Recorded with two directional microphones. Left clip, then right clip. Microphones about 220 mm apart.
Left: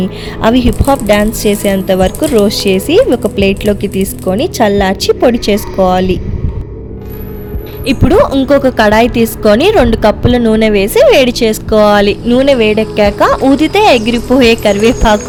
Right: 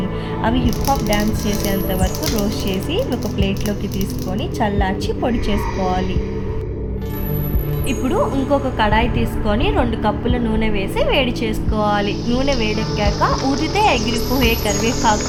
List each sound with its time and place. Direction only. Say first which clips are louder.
0.4 s a woman's voice: left 10 dB; 50° left (ahead or behind)
7.9 s a woman's voice: left 11 dB; 45° left (ahead or behind)